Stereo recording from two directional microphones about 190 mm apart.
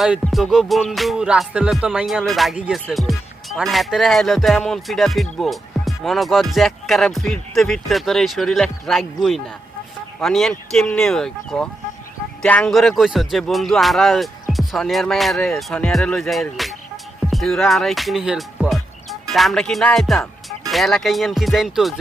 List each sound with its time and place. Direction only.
0.0 s music: centre (ahead or behind)
10.2 s music: centre (ahead or behind)
17.3 s speech: centre (ahead or behind)
19.3 s music: centre (ahead or behind)